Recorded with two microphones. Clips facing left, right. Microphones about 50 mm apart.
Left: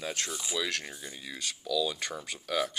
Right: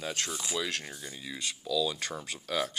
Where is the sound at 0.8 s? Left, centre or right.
Centre.